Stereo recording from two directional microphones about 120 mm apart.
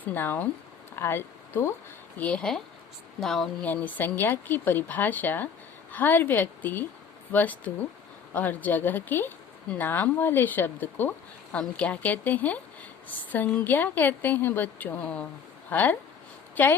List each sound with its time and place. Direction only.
0.0 s a woman's voice: 15° left (ahead or behind)
2.1 s a woman's voice: 10° left (ahead or behind)
3.7 s a woman's voice: 15° left (ahead or behind)